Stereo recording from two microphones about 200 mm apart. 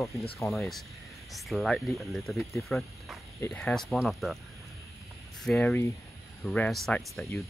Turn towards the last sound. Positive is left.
turn(degrees=0)  # may be behind; listen again after turning